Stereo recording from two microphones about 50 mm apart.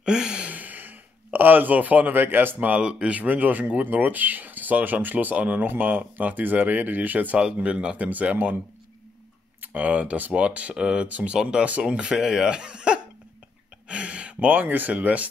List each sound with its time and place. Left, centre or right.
0.0 s a sound: centre
0.5 s a sound: right
2.7 s speech: centre
3.2 s speech: right
7.3 s speech: right
9.6 s speech: right